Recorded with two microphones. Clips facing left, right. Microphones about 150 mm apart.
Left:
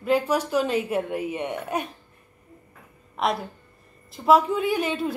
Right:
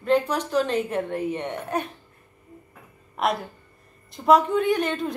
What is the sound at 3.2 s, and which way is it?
A woman's voice, centre (ahead or behind).